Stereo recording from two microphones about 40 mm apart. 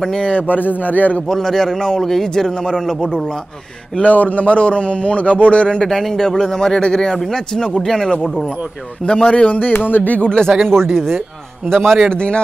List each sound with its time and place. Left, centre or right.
0.3 s a man's voice: left
1.2 s a man's voice: centre
4.0 s a man's voice: left
5.9 s a man's voice: centre
9.0 s a man's voice: left
9.6 s a man's voice: left
10.2 s a man's voice: left
12.1 s a man's voice: left